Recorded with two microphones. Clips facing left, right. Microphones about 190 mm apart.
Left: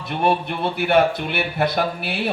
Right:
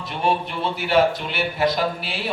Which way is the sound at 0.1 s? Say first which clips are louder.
Left 3 dB; 55° left (ahead or behind).